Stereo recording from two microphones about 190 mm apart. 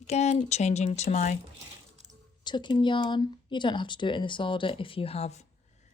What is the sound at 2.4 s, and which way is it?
Speech, 25° left (ahead or behind).